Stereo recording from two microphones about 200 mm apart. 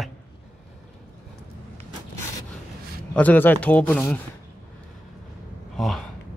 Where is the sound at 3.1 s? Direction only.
10° left (ahead or behind).